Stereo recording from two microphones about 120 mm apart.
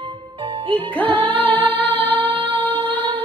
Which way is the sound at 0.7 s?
15° left (ahead or behind).